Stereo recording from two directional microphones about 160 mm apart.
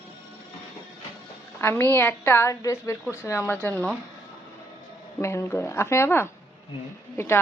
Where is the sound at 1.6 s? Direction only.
15° left (ahead or behind).